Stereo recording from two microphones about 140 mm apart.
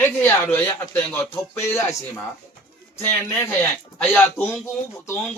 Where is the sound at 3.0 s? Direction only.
15° left (ahead or behind).